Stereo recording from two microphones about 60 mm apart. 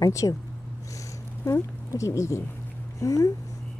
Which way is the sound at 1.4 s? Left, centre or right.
Left.